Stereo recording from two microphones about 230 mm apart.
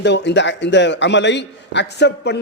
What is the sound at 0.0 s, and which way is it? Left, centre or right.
A man's voice, left.